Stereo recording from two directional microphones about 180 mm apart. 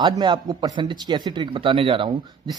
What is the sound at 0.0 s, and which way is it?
Speech, 25° right (ahead or behind).